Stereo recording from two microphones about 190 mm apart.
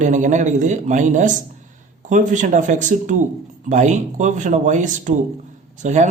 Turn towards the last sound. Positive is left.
turn(degrees=-40)  # may be behind; listen again after turning